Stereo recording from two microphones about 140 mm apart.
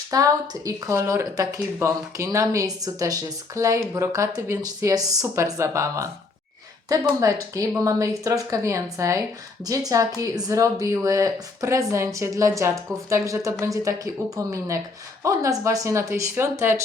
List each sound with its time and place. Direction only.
0.1 s speech: 25° right (ahead or behind)